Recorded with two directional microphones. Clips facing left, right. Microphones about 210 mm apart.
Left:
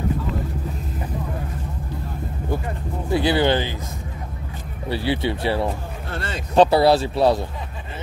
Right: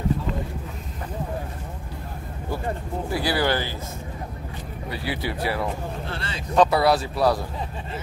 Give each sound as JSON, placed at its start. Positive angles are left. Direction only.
{"t": 3.1, "sound": "speech", "side_deg": 25}
{"t": 4.8, "sound": "speech", "side_deg": 30}